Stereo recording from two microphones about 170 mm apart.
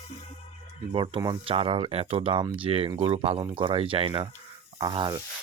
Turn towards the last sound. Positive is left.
turn(degrees=-25)  # may be behind; listen again after turning